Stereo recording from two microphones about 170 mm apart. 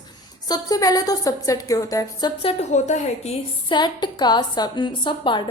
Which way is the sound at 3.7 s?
25° left (ahead or behind).